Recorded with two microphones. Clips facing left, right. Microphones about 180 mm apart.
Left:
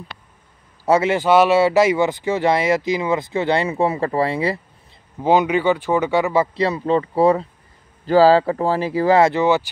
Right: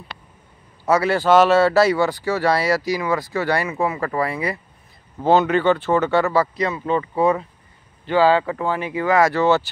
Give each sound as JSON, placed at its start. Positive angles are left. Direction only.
{"t": 0.8, "sound": "speech", "side_deg": 25}
{"t": 5.2, "sound": "speech", "side_deg": 15}
{"t": 6.6, "sound": "speech", "side_deg": 30}
{"t": 9.3, "sound": "speech", "side_deg": 15}